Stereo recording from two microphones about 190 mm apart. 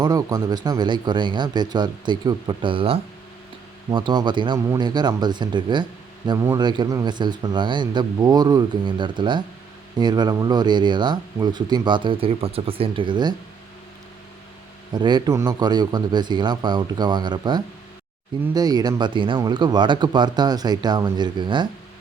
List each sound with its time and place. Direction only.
0.0 s speech: 20° right (ahead or behind)
14.9 s speech: 20° right (ahead or behind)